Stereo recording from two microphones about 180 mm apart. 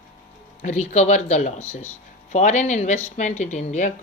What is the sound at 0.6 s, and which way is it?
Speech, 40° left (ahead or behind).